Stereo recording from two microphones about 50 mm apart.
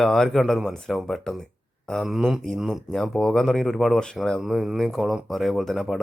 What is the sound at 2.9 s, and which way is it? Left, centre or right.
Speech, centre.